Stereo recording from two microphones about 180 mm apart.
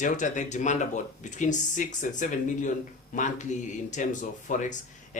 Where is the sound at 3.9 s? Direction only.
45° left (ahead or behind).